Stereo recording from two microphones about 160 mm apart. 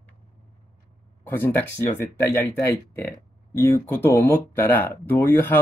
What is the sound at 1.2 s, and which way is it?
Speech, 10° left (ahead or behind).